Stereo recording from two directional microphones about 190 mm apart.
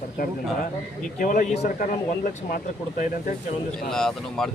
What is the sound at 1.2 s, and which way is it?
Speech, 45° left (ahead or behind).